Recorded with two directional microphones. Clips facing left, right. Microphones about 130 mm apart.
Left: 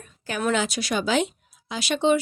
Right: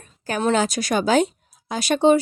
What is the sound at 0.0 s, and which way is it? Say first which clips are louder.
Speech: right 4 dB; 35° right (ahead or behind).